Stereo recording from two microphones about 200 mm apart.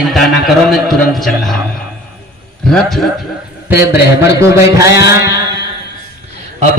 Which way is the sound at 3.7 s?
10° right (ahead or behind).